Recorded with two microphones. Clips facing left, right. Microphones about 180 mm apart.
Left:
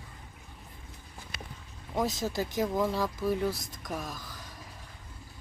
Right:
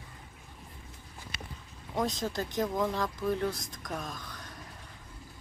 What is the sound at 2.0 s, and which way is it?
Speech, 5° left (ahead or behind).